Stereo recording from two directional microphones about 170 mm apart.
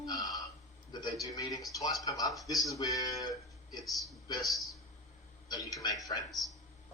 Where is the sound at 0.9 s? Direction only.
25° left (ahead or behind).